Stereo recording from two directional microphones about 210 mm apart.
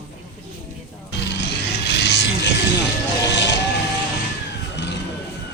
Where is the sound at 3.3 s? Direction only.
55° left (ahead or behind).